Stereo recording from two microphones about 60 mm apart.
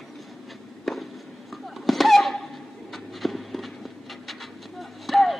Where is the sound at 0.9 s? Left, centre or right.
Centre.